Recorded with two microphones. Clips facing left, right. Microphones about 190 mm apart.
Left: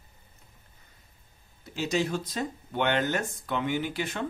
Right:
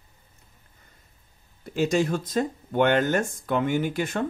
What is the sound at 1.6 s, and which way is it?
Speech, 50° right (ahead or behind).